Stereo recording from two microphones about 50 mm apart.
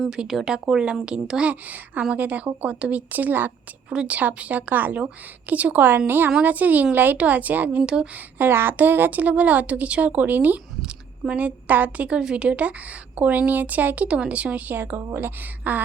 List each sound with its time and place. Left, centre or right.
0.3 s speech: centre
0.7 s a woman's voice: centre
1.6 s speech: right
3.8 s speech: right
8.1 s speech: right
8.7 s speech: right
12.0 s a woman's voice: centre
14.9 s speech: right
15.6 s speech: right